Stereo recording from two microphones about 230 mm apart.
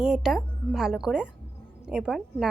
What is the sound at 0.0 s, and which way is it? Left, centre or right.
A woman's voice, centre.